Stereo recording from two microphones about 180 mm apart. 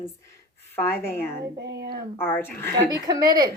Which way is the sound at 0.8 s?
10° left (ahead or behind).